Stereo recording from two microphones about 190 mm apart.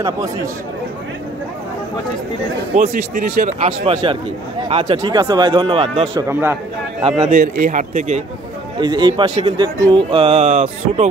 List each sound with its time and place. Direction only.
2.7 s speech: 45° right (ahead or behind); by 6.0 s 30° right (ahead or behind)
6.1 s a man's voice: 15° right (ahead or behind)
7.2 s a man's voice: 45° right (ahead or behind)
8.7 s speech: 25° right (ahead or behind)